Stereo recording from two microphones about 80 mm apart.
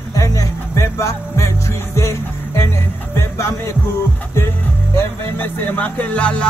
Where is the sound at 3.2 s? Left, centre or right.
Left.